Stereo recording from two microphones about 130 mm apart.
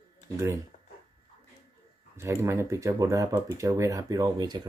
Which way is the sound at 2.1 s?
20° right (ahead or behind).